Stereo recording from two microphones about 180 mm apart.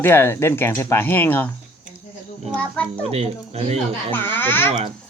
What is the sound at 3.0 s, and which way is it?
Speech, 35° right (ahead or behind).